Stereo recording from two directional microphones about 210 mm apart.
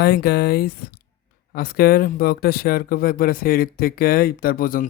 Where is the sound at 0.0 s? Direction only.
50° left (ahead or behind).